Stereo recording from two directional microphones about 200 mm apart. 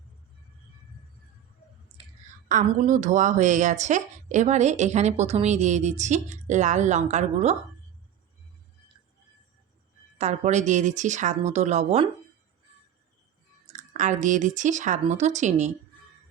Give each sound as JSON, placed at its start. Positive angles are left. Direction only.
{"t": 2.0, "sound": "a sound", "side_deg": -30}
{"t": 2.5, "sound": "a woman's voice", "side_deg": -40}
{"t": 10.2, "sound": "a woman's voice", "side_deg": -35}
{"t": 13.7, "sound": "a woman's voice", "side_deg": -40}